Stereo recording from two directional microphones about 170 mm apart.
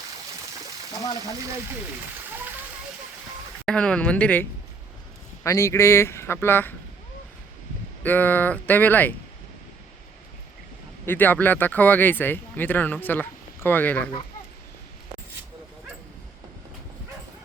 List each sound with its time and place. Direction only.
3.7 s speech: 5° left (ahead or behind)
8.0 s speech: 10° left (ahead or behind)
11.0 s speech: 10° left (ahead or behind)